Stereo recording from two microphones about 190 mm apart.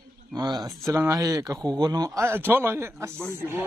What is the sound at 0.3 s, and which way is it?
A man's voice, 20° right (ahead or behind).